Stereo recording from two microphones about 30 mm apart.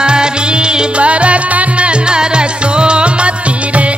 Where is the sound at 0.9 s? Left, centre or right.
Right.